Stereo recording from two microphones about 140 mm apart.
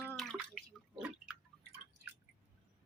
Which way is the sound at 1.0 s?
5° right (ahead or behind).